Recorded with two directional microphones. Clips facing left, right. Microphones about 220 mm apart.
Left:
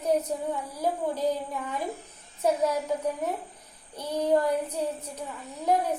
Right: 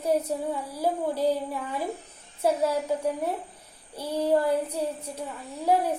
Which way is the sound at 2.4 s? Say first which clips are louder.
Right 1 dB; 10° right (ahead or behind).